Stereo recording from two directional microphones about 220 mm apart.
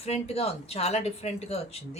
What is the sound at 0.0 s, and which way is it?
Speech, 25° left (ahead or behind).